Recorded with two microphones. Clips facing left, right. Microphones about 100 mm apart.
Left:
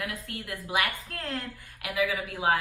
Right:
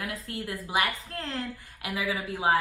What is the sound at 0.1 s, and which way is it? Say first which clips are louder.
A woman's voice: right 2 dB; 30° right (ahead or behind).